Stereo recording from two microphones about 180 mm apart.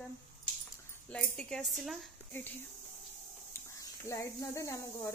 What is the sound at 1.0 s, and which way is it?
Speech, 5° left (ahead or behind).